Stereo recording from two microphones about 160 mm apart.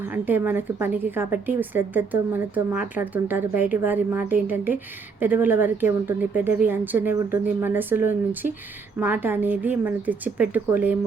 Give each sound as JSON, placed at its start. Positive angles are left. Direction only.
{"t": 0.0, "sound": "speech", "side_deg": -10}